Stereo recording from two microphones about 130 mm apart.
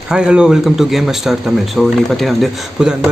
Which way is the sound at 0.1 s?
5° right (ahead or behind).